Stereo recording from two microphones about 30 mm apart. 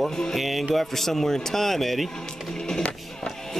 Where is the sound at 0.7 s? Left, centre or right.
Centre.